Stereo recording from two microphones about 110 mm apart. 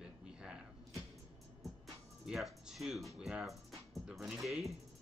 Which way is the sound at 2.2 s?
5° right (ahead or behind).